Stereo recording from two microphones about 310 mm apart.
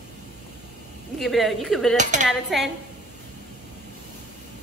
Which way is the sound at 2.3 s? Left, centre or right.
Centre.